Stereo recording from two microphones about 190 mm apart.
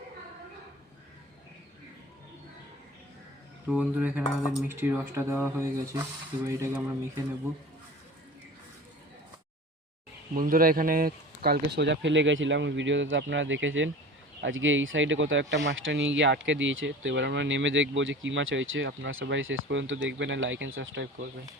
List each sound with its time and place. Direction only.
3.7 s speech: 5° right (ahead or behind)
10.3 s speech: 50° right (ahead or behind); by 21.2 s 70° right (ahead or behind)